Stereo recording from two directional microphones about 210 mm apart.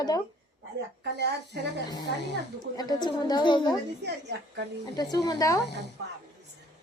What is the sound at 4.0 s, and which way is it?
Speech, 55° right (ahead or behind).